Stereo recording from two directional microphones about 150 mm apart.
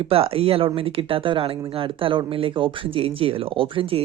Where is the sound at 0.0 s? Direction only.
40° right (ahead or behind).